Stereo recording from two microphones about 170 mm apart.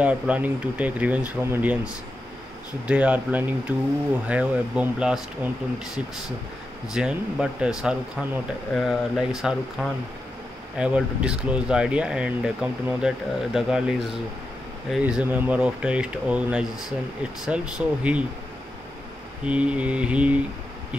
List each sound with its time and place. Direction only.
0.0 s speech: 10° right (ahead or behind)
2.9 s speech: 10° right (ahead or behind)
6.9 s speech: 5° right (ahead or behind)
19.4 s speech: 5° right (ahead or behind)